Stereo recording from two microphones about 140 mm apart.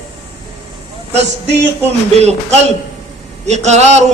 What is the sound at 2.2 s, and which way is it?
A man's voice, 55° right (ahead or behind).